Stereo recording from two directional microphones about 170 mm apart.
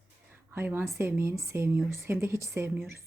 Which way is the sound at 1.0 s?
15° right (ahead or behind).